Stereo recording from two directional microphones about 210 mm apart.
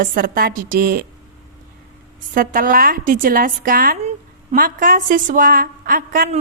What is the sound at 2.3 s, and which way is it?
A woman's voice, 40° right (ahead or behind).